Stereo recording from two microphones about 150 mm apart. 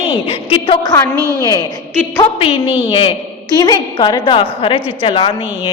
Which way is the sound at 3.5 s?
25° left (ahead or behind).